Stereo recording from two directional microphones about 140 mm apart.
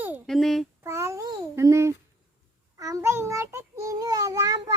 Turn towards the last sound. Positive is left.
turn(degrees=-25)  # may be behind; listen again after turning